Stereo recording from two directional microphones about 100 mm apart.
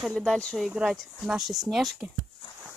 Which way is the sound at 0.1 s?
5° left (ahead or behind).